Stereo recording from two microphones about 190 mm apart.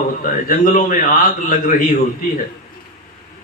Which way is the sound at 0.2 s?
45° left (ahead or behind).